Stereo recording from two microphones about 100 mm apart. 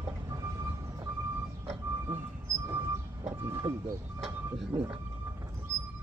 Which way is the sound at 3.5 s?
35° right (ahead or behind).